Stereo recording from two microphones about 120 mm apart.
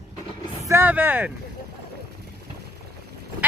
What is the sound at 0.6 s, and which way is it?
Speech, 20° right (ahead or behind).